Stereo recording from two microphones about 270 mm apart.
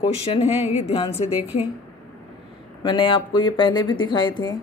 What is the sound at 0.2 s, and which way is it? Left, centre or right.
Speech, left.